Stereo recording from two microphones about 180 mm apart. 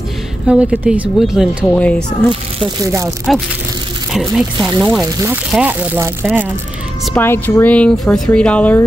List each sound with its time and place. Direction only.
0.5 s speech: 5° right (ahead or behind)
1.7 s speech: 5° left (ahead or behind)
2.8 s speech: 20° right (ahead or behind)
3.3 s speech: centre (ahead or behind)
5.0 s speech: 20° right (ahead or behind)
5.3 s speech: 10° right (ahead or behind)
7.2 s speech: 10° left (ahead or behind)